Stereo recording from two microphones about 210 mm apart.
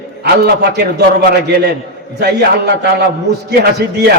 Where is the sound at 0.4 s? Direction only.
50° right (ahead or behind).